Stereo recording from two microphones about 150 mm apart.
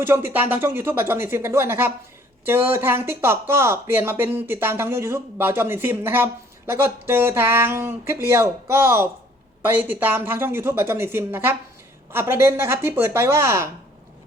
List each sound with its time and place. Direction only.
0.0 s speech: 15° right (ahead or behind)